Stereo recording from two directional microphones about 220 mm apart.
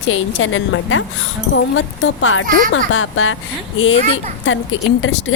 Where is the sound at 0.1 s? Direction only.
65° left (ahead or behind).